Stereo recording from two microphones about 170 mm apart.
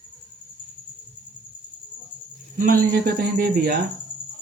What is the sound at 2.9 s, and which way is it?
Cricket, 65° right (ahead or behind).